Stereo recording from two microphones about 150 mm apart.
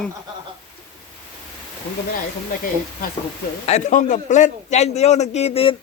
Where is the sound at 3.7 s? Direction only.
50° left (ahead or behind).